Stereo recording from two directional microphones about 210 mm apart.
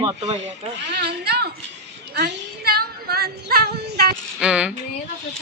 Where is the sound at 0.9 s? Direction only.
50° right (ahead or behind).